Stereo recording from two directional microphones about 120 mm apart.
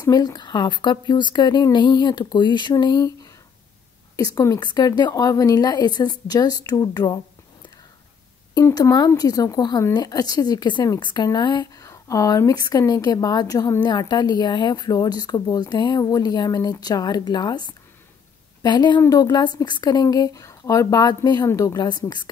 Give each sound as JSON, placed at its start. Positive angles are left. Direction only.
{"t": 0.0, "sound": "speech", "side_deg": 35}
{"t": 8.5, "sound": "speech", "side_deg": 30}